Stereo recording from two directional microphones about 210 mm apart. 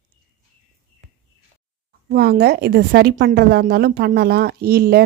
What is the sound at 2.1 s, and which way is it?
A woman's voice, 50° right (ahead or behind).